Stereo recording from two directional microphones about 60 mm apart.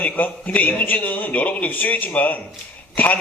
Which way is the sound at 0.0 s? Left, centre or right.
Left.